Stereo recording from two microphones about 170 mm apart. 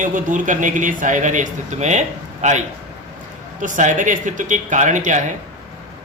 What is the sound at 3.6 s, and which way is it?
A man's voice, 50° right (ahead or behind).